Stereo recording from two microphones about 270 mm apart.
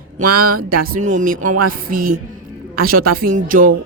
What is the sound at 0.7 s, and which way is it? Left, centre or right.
A woman's voice, right.